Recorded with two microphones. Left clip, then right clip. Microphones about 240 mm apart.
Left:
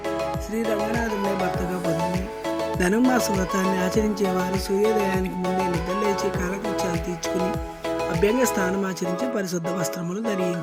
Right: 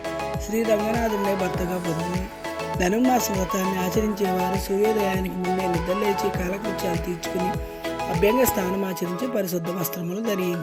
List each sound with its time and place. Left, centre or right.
0.5 s music: centre
2.8 s speech: centre
4.5 s music: centre
8.2 s speech: centre